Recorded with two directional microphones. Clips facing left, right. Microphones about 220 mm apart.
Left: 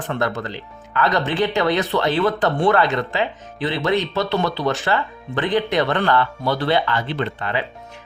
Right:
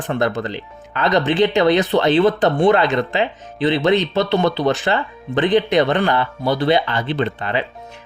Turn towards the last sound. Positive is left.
turn(degrees=-25)  # may be behind; listen again after turning